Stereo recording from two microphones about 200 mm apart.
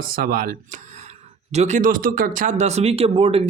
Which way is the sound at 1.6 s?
35° right (ahead or behind).